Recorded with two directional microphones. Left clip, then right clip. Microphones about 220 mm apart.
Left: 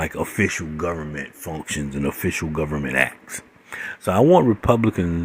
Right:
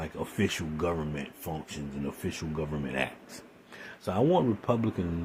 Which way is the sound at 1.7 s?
35° left (ahead or behind).